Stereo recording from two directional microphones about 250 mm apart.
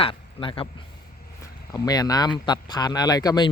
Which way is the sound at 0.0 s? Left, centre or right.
Left.